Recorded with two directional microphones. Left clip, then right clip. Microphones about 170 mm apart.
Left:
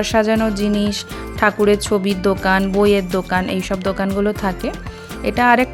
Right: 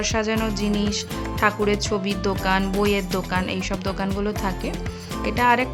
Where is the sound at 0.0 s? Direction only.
35° left (ahead or behind).